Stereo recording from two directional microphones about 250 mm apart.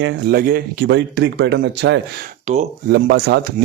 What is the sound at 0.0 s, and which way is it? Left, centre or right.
Speech, right.